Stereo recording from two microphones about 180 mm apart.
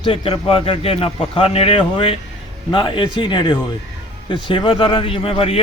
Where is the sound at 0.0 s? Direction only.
30° left (ahead or behind).